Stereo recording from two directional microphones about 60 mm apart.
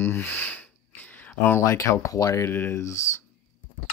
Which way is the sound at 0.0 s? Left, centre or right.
Left.